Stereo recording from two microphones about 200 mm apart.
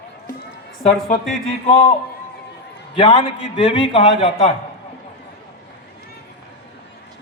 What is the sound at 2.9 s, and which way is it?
A man's voice, 35° left (ahead or behind).